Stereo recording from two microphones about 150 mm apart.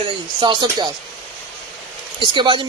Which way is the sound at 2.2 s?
30° right (ahead or behind).